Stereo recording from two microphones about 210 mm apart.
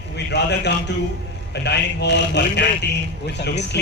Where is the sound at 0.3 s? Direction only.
55° left (ahead or behind).